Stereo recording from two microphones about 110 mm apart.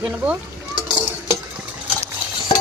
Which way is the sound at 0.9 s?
40° right (ahead or behind).